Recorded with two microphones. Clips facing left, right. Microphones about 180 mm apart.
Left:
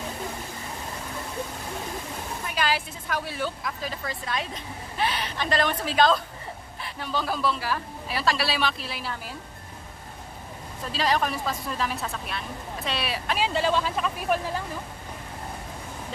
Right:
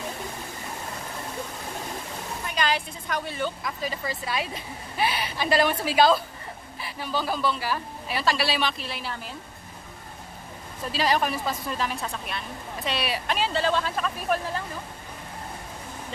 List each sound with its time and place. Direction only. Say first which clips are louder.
2.4 s a man's voice: even; 5° left (ahead or behind)
10.9 s a man's voice: right 1 dB; 5° right (ahead or behind)
13.4 s speech: left 1 dB; 15° left (ahead or behind)